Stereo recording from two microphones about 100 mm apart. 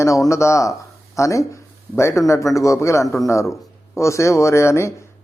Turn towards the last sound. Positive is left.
turn(degrees=30)  # may be behind; listen again after turning